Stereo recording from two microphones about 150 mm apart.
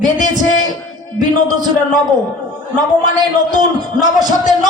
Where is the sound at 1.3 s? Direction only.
30° right (ahead or behind).